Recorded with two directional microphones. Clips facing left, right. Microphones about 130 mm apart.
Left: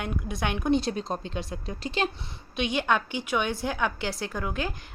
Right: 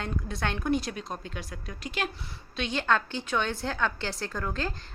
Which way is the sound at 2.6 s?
15° left (ahead or behind).